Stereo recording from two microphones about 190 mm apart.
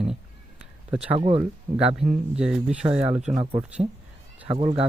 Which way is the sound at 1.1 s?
25° right (ahead or behind).